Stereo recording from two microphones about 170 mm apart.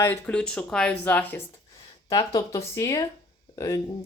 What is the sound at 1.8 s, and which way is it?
Speech, 25° left (ahead or behind).